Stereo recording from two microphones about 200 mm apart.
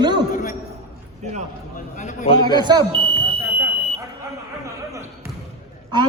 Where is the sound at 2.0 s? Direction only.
35° left (ahead or behind).